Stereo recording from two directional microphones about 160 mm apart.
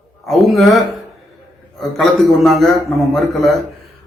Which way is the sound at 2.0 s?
Centre (ahead or behind).